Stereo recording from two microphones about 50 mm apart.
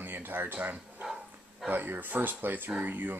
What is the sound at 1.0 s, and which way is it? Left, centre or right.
Dog, centre.